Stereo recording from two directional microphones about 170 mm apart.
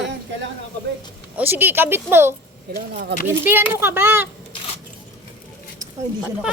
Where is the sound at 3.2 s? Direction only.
10° right (ahead or behind).